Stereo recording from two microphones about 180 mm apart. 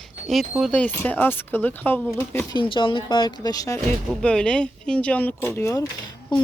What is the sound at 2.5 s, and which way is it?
Speech, 25° left (ahead or behind).